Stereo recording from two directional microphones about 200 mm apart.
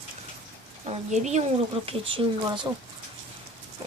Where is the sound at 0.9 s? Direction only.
35° right (ahead or behind).